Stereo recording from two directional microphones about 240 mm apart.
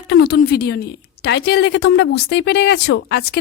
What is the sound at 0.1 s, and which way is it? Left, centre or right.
A woman's voice, left.